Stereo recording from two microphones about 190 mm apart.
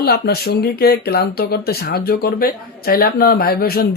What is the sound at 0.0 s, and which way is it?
Speech, 55° left (ahead or behind).